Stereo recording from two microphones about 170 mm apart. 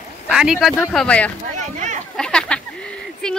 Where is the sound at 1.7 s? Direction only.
45° right (ahead or behind).